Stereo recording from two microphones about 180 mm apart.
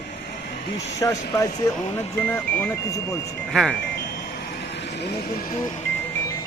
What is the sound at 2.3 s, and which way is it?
A man's voice, 10° left (ahead or behind).